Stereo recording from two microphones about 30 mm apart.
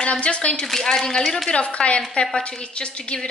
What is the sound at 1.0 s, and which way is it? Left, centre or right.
Speech, centre.